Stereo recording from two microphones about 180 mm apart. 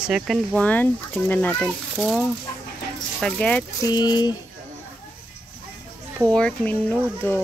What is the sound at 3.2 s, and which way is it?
Speech, 5° left (ahead or behind).